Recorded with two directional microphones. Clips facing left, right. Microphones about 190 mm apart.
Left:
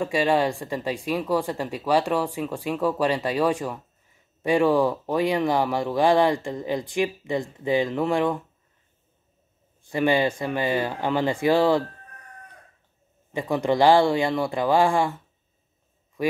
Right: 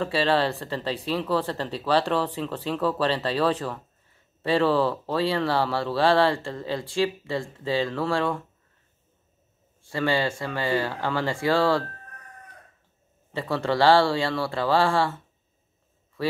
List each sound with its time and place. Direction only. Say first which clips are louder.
0.0 s speech: left 1 dB; 15° left (ahead or behind)
9.8 s speech: left 3 dB; 20° left (ahead or behind)
13.3 s speech: left 3 dB; 15° left (ahead or behind)
16.2 s speech: left 3 dB; 15° left (ahead or behind)